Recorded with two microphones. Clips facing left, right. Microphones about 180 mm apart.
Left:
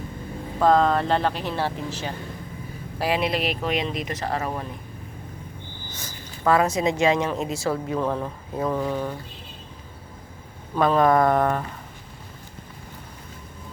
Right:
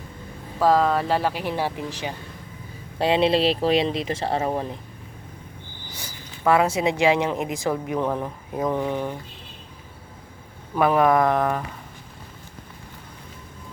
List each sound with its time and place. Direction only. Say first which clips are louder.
0.6 s a woman's voice: even; 5° right (ahead or behind)
3.0 s speech: right 5 dB; 25° right (ahead or behind)
6.0 s a woman's voice: even; 15° right (ahead or behind)
10.8 s speech: even; 10° right (ahead or behind)